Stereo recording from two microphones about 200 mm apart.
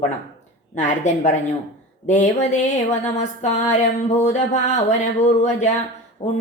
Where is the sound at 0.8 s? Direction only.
35° left (ahead or behind).